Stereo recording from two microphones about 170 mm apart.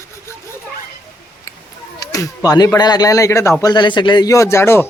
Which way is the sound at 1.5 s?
20° left (ahead or behind).